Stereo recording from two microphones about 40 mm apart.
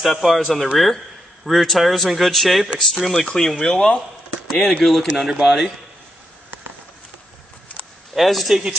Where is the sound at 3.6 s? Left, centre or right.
Centre.